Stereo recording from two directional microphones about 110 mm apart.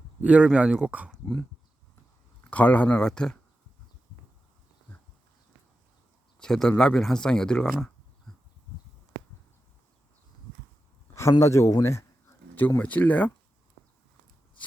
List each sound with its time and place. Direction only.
0.2 s speech: 10° right (ahead or behind)
2.4 s speech: 15° left (ahead or behind)
6.4 s speech: 5° left (ahead or behind)
11.1 s speech: 25° left (ahead or behind)